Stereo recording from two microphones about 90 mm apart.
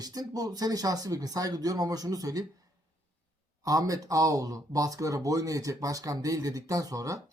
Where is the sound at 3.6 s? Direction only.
40° right (ahead or behind).